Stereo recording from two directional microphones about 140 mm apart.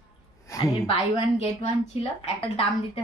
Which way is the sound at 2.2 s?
40° left (ahead or behind).